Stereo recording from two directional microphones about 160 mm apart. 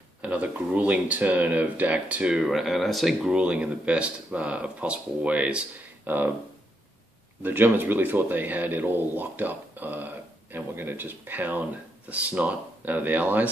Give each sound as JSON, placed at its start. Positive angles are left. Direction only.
{"t": 0.2, "sound": "speech", "side_deg": -10}
{"t": 7.4, "sound": "speech", "side_deg": -10}